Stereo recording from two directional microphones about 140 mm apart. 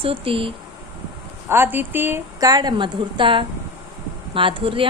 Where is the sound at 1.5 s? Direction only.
15° right (ahead or behind).